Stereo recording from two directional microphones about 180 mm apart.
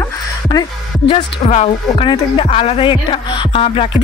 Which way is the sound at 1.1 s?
35° left (ahead or behind).